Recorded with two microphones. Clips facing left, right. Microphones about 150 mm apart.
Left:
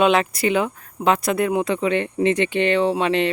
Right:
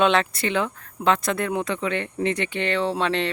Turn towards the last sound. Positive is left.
turn(degrees=15)  # may be behind; listen again after turning